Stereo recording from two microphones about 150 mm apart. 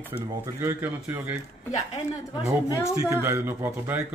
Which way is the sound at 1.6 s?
50° left (ahead or behind).